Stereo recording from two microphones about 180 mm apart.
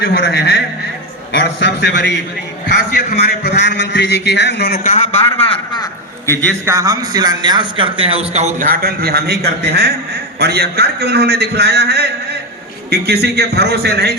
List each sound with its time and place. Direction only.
0.0 s a man's voice: 65° left (ahead or behind)
1.3 s a man's voice: 80° left
2.9 s a man's voice: 60° left (ahead or behind)
4.8 s a man's voice: 40° left (ahead or behind)
5.8 s a sound: 15° left (ahead or behind)
6.7 s a man's voice: 20° right (ahead or behind); by 8.6 s 40° right (ahead or behind)
8.6 s a man's voice: 55° right (ahead or behind)